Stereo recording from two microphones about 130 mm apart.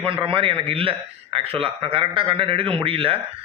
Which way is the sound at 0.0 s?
40° right (ahead or behind).